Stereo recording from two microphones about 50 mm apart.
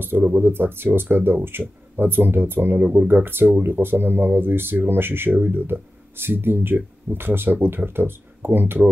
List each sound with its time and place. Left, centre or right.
0.3 s speech: right